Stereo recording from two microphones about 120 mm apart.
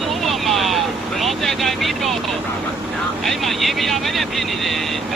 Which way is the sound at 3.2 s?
Centre (ahead or behind).